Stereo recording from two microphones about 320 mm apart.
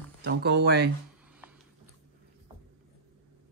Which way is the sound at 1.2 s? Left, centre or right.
Centre.